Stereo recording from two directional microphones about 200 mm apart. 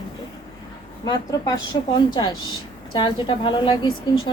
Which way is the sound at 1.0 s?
20° left (ahead or behind).